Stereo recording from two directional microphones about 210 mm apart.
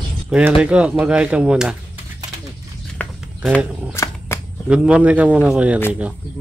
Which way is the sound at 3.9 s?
15° left (ahead or behind).